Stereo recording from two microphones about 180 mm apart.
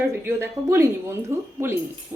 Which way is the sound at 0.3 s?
15° right (ahead or behind).